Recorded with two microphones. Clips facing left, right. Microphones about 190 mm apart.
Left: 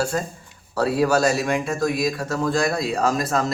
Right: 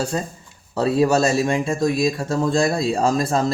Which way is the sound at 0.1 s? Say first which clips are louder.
Even; 25° right (ahead or behind).